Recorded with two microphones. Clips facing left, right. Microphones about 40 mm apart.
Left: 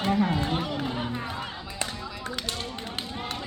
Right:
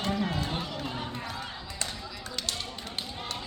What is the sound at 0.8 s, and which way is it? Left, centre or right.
Run, centre.